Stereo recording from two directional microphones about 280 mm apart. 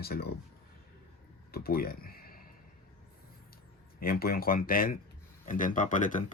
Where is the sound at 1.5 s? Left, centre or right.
Left.